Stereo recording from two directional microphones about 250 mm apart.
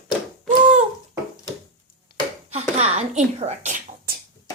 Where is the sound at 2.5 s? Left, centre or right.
Right.